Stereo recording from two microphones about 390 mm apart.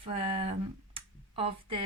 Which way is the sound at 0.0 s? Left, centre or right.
Centre.